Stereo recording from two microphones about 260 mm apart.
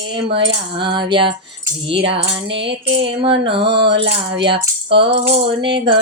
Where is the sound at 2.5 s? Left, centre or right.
Right.